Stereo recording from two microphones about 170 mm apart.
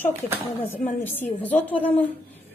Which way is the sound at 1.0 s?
10° left (ahead or behind).